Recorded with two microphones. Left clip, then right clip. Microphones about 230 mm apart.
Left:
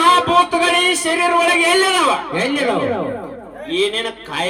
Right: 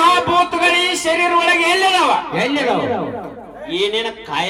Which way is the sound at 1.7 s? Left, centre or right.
Left.